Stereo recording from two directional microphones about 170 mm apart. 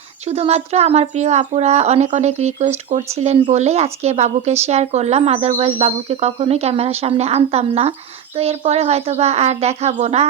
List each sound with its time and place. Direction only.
0.3 s speech: 40° right (ahead or behind)